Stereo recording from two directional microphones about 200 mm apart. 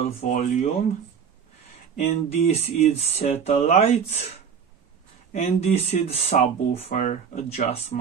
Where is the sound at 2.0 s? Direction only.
30° left (ahead or behind).